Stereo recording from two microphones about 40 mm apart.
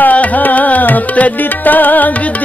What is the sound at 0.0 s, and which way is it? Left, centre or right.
Music, left.